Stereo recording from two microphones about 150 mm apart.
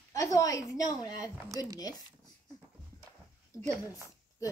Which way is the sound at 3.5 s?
20° left (ahead or behind).